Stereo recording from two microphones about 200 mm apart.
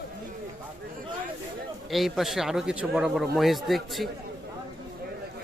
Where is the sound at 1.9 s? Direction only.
Centre (ahead or behind).